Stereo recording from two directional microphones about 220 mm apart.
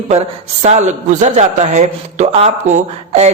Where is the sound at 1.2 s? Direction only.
30° right (ahead or behind).